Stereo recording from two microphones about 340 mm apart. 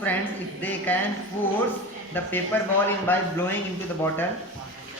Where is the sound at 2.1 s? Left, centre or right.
Centre.